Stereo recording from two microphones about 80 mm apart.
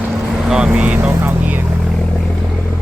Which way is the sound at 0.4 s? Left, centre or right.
Centre.